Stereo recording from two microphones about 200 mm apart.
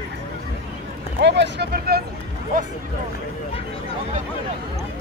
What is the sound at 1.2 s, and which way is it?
Speech, 60° right (ahead or behind).